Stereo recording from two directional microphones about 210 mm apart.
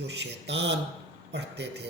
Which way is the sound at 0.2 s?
55° right (ahead or behind).